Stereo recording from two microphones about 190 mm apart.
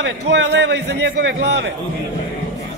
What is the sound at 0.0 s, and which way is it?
A man's voice, 65° right (ahead or behind).